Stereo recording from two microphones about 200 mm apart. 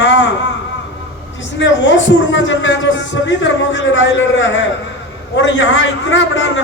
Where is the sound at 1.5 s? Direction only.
65° left (ahead or behind).